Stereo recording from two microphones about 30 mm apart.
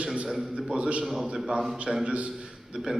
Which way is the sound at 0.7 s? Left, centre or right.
Right.